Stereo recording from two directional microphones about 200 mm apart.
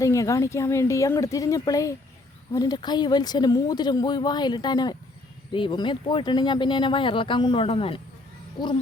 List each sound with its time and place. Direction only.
0.0 s speech: 15° left (ahead or behind)